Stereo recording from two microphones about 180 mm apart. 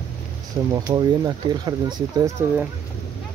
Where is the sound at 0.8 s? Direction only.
20° right (ahead or behind).